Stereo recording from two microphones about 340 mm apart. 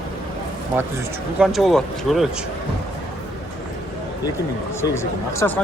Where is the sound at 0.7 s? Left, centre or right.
Centre.